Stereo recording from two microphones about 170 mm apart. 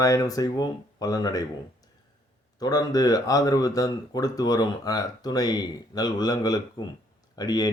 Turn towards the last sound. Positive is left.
turn(degrees=20)  # may be behind; listen again after turning